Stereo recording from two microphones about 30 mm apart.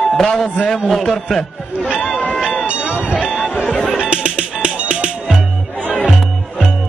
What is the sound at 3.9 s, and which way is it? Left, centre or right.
Music, right.